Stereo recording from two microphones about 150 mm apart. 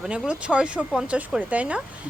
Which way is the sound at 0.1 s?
5° right (ahead or behind).